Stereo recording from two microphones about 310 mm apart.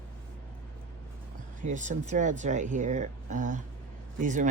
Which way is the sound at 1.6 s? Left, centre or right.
Right.